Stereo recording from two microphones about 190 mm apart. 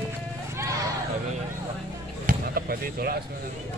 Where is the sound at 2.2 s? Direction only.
50° right (ahead or behind).